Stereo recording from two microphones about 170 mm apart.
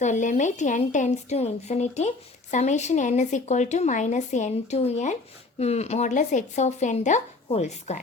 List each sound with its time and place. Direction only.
0.0 s a woman's voice: 45° left (ahead or behind)